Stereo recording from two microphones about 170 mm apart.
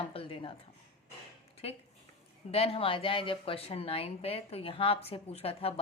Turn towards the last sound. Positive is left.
turn(degrees=35)  # may be behind; listen again after turning